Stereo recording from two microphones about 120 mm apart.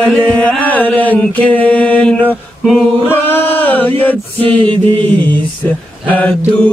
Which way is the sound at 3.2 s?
15° left (ahead or behind).